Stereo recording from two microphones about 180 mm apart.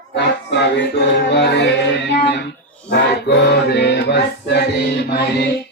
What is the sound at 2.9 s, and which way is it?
Music, 70° left (ahead or behind).